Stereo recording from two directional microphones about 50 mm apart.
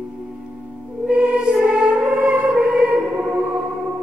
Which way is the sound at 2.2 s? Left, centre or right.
Centre.